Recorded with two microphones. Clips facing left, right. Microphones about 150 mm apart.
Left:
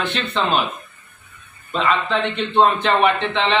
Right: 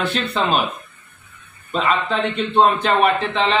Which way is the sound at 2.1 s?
5° right (ahead or behind).